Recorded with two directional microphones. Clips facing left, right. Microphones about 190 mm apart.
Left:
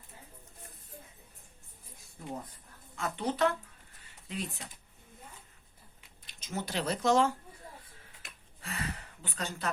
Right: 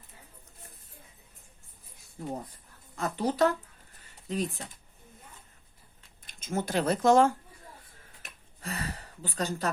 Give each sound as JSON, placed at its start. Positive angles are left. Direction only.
{"t": 2.2, "sound": "speech", "side_deg": -40}
{"t": 6.2, "sound": "speech", "side_deg": -50}
{"t": 8.6, "sound": "a sound", "side_deg": -40}